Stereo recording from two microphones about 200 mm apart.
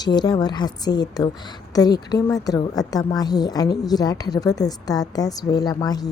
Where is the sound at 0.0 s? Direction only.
20° left (ahead or behind).